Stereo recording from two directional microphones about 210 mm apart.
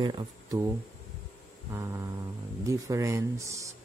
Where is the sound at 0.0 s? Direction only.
20° right (ahead or behind).